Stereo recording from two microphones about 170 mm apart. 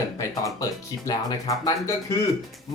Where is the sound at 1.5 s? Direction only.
20° left (ahead or behind).